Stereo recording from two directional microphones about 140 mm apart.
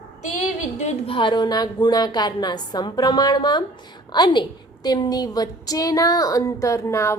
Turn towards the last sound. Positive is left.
turn(degrees=20)  # may be behind; listen again after turning